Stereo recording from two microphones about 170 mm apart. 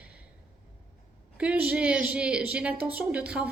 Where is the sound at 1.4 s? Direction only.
10° right (ahead or behind).